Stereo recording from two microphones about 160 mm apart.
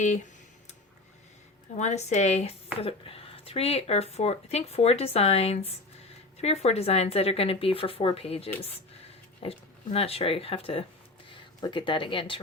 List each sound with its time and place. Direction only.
1.7 s speech: 45° left (ahead or behind)